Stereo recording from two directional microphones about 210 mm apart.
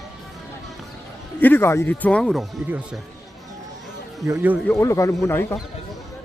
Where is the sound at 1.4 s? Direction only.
10° left (ahead or behind).